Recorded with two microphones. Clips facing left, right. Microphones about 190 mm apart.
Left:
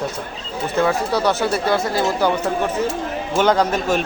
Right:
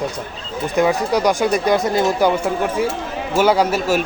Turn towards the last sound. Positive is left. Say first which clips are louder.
# right 1 dB
turn(degrees=-10)  # may be behind; listen again after turning